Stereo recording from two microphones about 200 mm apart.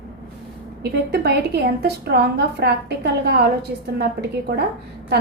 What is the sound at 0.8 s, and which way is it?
A woman's voice, 55° right (ahead or behind).